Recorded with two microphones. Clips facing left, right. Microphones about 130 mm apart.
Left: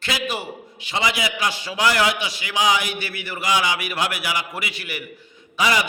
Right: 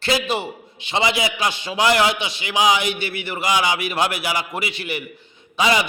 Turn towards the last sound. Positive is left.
turn(degrees=-25)  # may be behind; listen again after turning